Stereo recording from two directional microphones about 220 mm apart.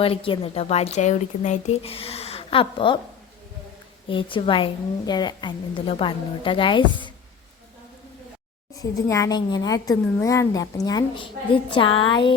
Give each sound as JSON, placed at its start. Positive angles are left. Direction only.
{"t": 0.0, "sound": "speech", "side_deg": 25}
{"t": 4.1, "sound": "speech", "side_deg": 25}
{"t": 8.8, "sound": "a woman's voice", "side_deg": 15}